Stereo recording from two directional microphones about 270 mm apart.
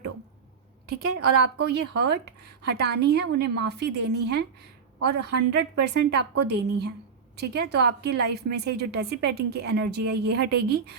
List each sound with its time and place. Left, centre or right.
0.9 s a woman's voice: right
1.2 s a woman's voice: right
5.5 s a woman's voice: right